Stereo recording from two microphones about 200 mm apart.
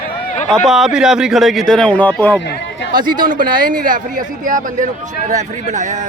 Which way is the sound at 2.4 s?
65° left (ahead or behind).